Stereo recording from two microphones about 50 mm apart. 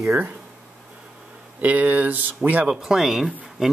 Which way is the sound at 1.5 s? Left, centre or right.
Right.